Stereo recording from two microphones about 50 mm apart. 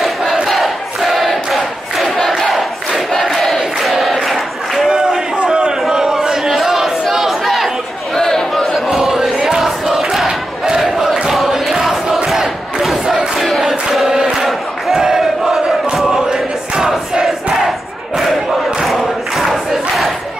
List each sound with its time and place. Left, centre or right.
0.0 s crowd: centre
4.8 s a sound: centre
8.2 s chatter: centre
8.8 s chant: centre
9.6 s crowd: centre
11.2 s a sound: centre
12.3 s crowd: centre
13.5 s chant: centre
14.3 s crowd: centre
17.6 s crowd: centre